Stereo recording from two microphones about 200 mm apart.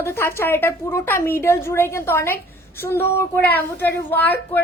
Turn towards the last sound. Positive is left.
turn(degrees=10)  # may be behind; listen again after turning